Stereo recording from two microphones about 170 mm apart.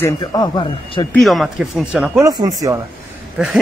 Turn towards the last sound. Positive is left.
turn(degrees=-5)  # may be behind; listen again after turning